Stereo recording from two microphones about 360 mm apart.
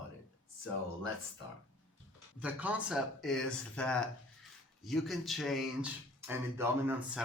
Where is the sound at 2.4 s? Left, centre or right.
Centre.